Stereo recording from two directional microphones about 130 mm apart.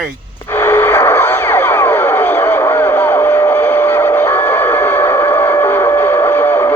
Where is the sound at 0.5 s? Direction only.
15° left (ahead or behind).